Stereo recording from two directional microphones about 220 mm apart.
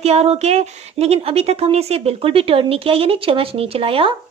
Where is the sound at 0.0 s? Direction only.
30° right (ahead or behind).